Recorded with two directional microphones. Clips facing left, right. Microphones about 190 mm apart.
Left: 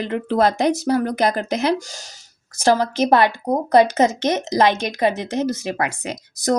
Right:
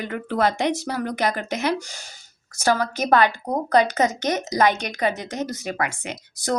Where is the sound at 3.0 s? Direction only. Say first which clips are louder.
Left 3 dB; 25° left (ahead or behind).